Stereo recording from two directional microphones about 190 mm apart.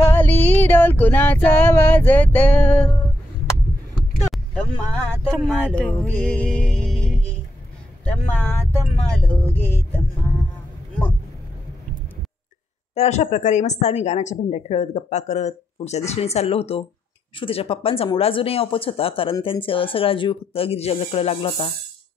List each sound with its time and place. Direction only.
0.0 s female singing: 10° left (ahead or behind)
5.3 s speech: 5° left (ahead or behind)
5.9 s music: centre (ahead or behind)
8.0 s a sound: 5° left (ahead or behind)
12.9 s a woman's voice: 35° left (ahead or behind)